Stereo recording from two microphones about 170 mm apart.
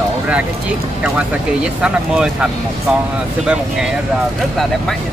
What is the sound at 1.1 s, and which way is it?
Speech, 5° right (ahead or behind).